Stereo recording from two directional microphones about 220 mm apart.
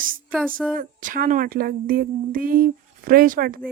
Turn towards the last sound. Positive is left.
turn(degrees=-40)  # may be behind; listen again after turning